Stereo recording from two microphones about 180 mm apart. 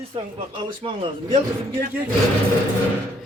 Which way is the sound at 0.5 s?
25° right (ahead or behind).